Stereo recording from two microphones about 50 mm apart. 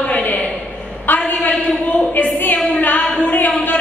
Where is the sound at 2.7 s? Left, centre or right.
Left.